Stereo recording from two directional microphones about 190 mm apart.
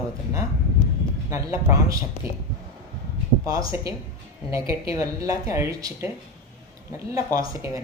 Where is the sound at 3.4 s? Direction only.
20° right (ahead or behind).